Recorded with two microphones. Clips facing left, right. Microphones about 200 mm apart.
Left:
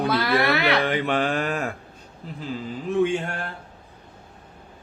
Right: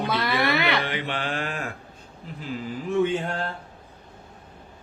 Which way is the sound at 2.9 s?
15° left (ahead or behind).